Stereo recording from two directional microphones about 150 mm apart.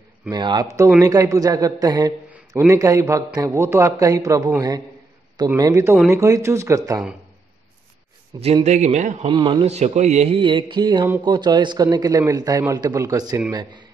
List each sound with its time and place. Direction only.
0.3 s a man's voice: 30° right (ahead or behind)
8.3 s a man's voice: 25° right (ahead or behind)
8.6 s a man's voice: 50° right (ahead or behind)
9.3 s speech: 30° right (ahead or behind)
9.7 s a man's voice: 45° right (ahead or behind); by 13.8 s 30° right (ahead or behind)